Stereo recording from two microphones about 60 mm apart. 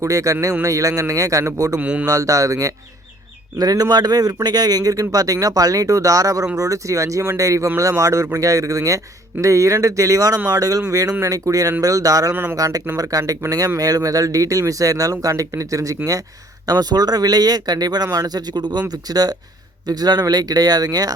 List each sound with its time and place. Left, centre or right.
0.0 s speech: right
1.8 s speech: right
2.0 s speech: right
3.6 s speech: right
10.5 s speech: right
11.2 s speech: right
12.3 s speech: right
12.5 s speech: right
13.0 s speech: right
16.6 s speech: right